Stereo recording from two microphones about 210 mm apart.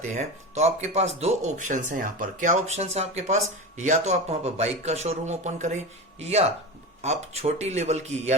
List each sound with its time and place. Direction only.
0.2 s speech: 30° right (ahead or behind)